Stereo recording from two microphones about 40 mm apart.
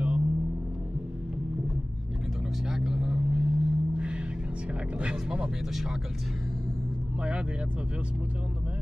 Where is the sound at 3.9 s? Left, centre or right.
Right.